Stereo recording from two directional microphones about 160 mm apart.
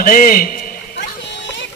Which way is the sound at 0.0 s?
60° left (ahead or behind).